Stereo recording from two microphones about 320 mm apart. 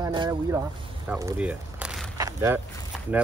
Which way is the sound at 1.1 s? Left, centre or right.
Centre.